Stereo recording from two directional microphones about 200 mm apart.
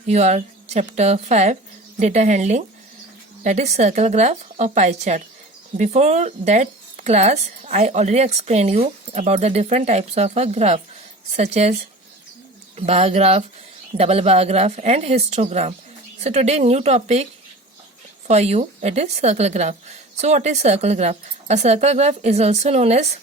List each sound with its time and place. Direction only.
0.1 s speech: 35° right (ahead or behind)
18.3 s speech: 35° right (ahead or behind)